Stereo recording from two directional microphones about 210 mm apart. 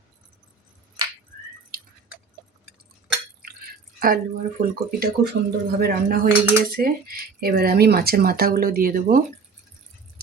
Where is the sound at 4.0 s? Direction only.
45° right (ahead or behind).